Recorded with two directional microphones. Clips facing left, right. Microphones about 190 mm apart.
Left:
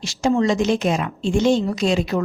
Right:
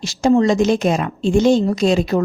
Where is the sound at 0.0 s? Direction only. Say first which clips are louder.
Right 4 dB; 40° right (ahead or behind).